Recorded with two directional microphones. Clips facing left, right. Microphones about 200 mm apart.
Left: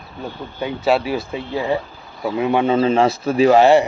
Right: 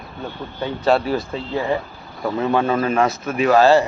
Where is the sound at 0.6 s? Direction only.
10° left (ahead or behind).